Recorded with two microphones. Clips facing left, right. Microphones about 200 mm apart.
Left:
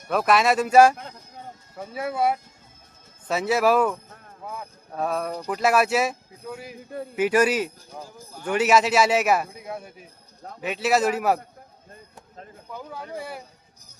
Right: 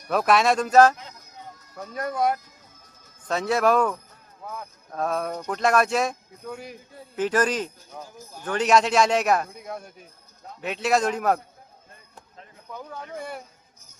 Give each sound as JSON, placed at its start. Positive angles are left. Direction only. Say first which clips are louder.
{"t": 0.1, "sound": "a man's voice", "louder": "even", "side_deg": 0}
{"t": 1.5, "sound": "run", "louder": "left 1 dB", "side_deg": 30}
{"t": 1.9, "sound": "a man's voice", "louder": "left 1 dB", "side_deg": 5}
{"t": 12.7, "sound": "a man's voice", "louder": "left 1 dB", "side_deg": 5}